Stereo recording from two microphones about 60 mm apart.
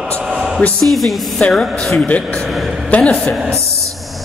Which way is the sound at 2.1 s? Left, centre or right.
Left.